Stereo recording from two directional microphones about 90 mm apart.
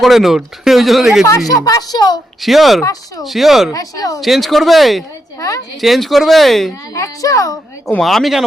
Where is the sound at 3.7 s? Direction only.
40° left (ahead or behind).